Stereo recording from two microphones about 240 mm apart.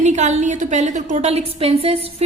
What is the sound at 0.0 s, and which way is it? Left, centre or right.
A woman's voice, right.